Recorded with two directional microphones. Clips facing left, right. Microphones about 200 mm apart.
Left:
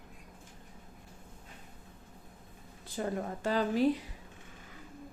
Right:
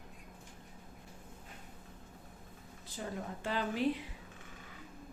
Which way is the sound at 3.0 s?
60° left (ahead or behind).